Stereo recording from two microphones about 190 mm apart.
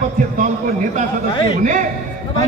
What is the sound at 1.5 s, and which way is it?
Speech, 40° right (ahead or behind).